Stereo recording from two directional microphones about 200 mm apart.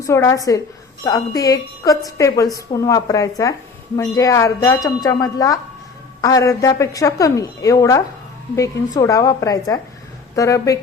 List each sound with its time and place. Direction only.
0.0 s a woman's voice: 15° left (ahead or behind)